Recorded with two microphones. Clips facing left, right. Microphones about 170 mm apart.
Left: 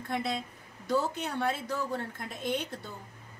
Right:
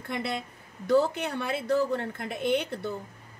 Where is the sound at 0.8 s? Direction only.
65° right (ahead or behind).